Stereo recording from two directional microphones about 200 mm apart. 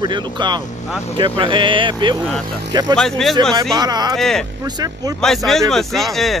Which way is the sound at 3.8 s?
20° right (ahead or behind).